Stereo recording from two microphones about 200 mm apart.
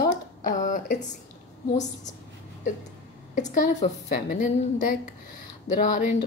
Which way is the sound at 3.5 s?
40° left (ahead or behind).